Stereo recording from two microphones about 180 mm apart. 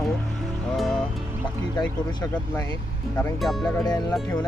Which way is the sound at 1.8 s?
20° left (ahead or behind).